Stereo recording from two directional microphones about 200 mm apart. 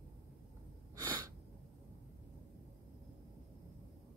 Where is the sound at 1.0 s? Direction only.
15° right (ahead or behind).